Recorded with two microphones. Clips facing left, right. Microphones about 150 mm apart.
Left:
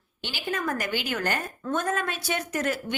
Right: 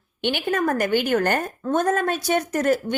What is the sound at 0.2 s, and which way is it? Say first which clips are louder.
A woman's voice: right 9 dB; 60° right (ahead or behind).